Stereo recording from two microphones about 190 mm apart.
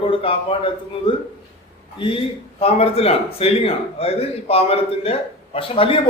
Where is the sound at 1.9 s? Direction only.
25° left (ahead or behind).